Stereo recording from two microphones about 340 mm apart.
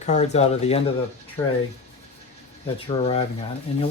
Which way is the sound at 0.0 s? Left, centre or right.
Centre.